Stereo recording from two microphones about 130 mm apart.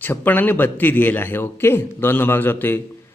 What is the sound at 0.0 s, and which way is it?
A man's voice, 15° left (ahead or behind).